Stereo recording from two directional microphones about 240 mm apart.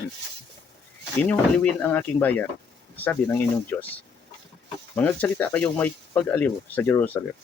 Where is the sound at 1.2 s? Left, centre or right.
Centre.